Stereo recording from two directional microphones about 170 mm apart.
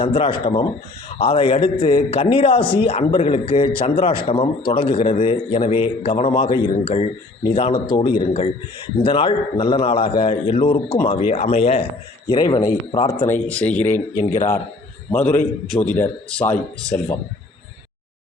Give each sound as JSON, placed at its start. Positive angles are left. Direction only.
{"t": 0.0, "sound": "speech", "side_deg": 30}
{"t": 12.3, "sound": "speech", "side_deg": 25}
{"t": 13.2, "sound": "speech", "side_deg": 10}